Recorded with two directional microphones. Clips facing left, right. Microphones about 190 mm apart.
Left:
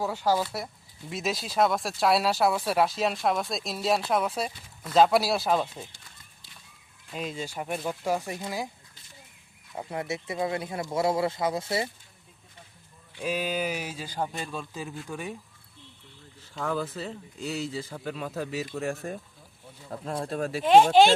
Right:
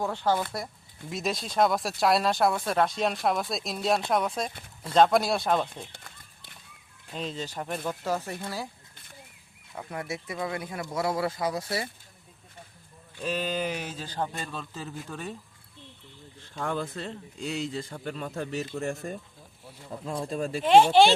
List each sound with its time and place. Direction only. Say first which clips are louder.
0.0 s speech: left 1 dB; 10° left (ahead or behind)
5.9 s a sound: right 5 dB; 55° right (ahead or behind)
7.1 s speech: even; 10° left (ahead or behind)
9.7 s speech: left 3 dB; 25° left (ahead or behind)
13.1 s speech: left 1 dB; 10° left (ahead or behind)
16.6 s speech: left 1 dB; 5° left (ahead or behind)
20.2 s speech: left 1 dB; centre (ahead or behind)